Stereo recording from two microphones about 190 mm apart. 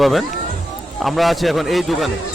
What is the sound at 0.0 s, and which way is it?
A man's voice, centre (ahead or behind).